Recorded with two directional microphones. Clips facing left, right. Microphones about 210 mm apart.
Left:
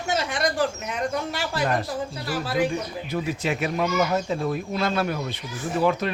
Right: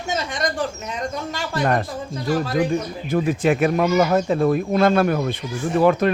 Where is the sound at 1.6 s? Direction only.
55° right (ahead or behind).